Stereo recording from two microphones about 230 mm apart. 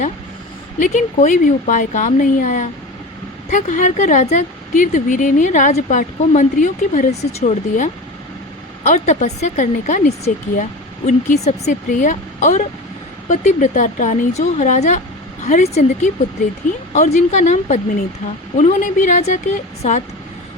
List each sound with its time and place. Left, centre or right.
0.8 s a woman's voice: left